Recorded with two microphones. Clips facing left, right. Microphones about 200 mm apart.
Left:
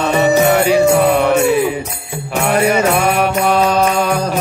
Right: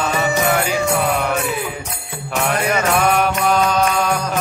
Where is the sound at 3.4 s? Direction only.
30° left (ahead or behind).